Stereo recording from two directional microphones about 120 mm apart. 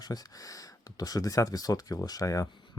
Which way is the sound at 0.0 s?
35° left (ahead or behind).